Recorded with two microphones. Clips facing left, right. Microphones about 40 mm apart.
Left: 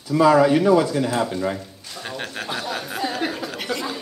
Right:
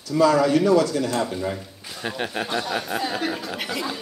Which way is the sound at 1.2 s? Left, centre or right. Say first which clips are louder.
Left 3 dB; centre.